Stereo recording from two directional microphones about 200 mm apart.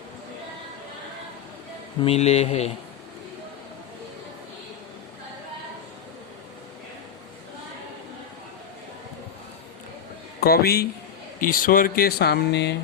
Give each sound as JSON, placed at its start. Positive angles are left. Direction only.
{"t": 2.0, "sound": "speech", "side_deg": 30}
{"t": 10.4, "sound": "speech", "side_deg": 50}